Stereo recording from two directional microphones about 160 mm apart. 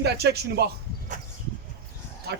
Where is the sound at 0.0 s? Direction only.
90° right.